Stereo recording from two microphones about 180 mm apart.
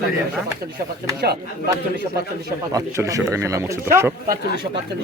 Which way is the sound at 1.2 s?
60° right (ahead or behind).